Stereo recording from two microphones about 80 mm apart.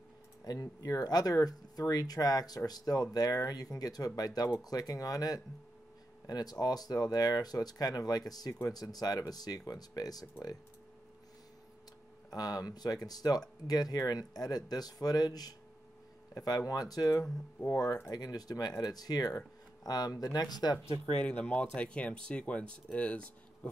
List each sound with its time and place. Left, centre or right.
0.5 s speech: left
12.3 s speech: left
21.2 s speech: centre